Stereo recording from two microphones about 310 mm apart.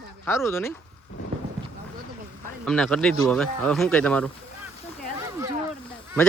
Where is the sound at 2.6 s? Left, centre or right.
Centre.